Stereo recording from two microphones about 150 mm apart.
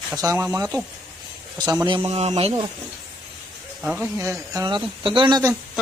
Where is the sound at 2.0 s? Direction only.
45° right (ahead or behind).